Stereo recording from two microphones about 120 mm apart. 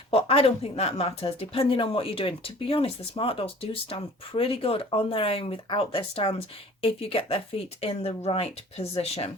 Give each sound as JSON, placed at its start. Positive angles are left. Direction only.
{"t": 0.1, "sound": "speech", "side_deg": 55}